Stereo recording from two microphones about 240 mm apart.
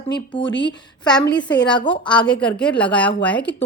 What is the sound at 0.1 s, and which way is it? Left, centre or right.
A woman's voice, centre.